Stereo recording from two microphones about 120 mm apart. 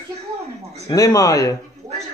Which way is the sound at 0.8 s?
30° left (ahead or behind).